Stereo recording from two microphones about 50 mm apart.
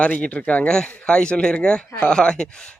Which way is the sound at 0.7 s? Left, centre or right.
Centre.